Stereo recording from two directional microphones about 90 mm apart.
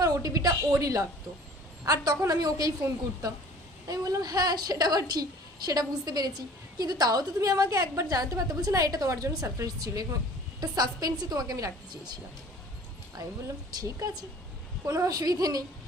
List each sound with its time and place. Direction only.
0.0 s a woman's voice: 45° right (ahead or behind)
13.8 s a woman's voice: 40° right (ahead or behind)